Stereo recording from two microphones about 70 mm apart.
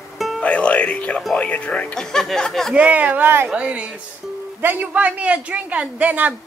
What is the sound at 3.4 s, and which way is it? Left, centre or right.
Speech, centre.